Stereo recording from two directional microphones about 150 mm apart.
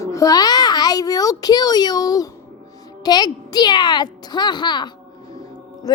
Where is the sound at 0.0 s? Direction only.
20° left (ahead or behind).